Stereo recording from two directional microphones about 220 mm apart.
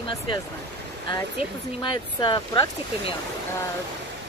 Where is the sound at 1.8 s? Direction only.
20° left (ahead or behind).